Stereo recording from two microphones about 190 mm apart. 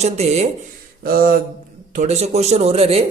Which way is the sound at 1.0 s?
50° right (ahead or behind).